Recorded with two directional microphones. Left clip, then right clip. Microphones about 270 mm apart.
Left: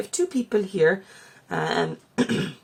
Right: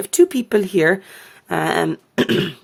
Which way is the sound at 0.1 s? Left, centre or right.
Right.